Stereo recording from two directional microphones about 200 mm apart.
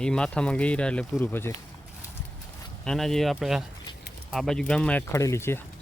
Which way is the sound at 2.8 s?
5° left (ahead or behind).